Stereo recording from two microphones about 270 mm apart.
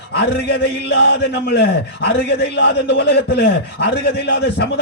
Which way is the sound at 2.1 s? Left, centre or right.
Left.